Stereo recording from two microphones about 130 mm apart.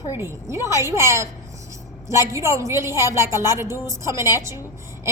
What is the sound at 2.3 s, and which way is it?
A woman's voice, 20° right (ahead or behind).